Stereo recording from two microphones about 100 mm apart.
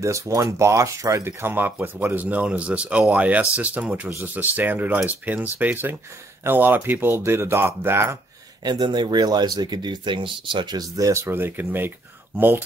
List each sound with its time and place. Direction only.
0.0 s speech: 30° right (ahead or behind)
8.6 s speech: 45° right (ahead or behind); by 12.6 s 20° right (ahead or behind)